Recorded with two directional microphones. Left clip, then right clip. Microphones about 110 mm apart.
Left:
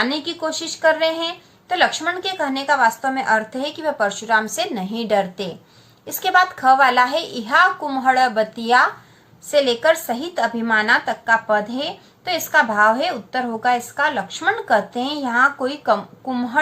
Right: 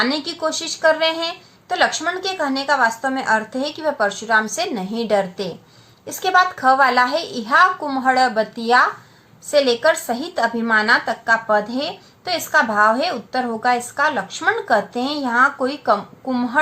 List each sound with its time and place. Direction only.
0.0 s a woman's voice: 35° right (ahead or behind)